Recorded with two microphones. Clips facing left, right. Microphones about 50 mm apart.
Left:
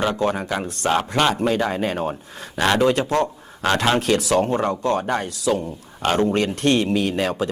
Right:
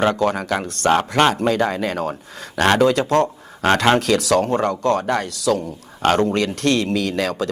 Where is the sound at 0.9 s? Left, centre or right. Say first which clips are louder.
Right 3 dB; right.